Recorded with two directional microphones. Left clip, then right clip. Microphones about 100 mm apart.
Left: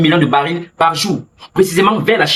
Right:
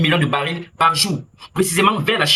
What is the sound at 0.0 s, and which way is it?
Speech, 35° right (ahead or behind).